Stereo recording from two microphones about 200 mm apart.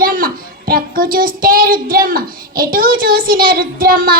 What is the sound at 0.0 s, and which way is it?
Child singing, 45° right (ahead or behind).